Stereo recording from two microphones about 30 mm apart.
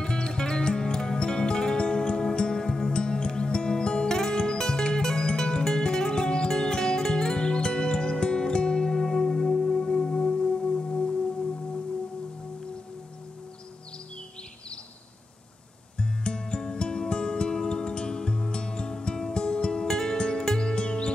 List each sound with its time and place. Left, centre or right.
0.0 s music: left
2.5 s music: centre
2.9 s music: left
9.0 s music: centre
10.3 s singing bowl: centre
16.0 s music: left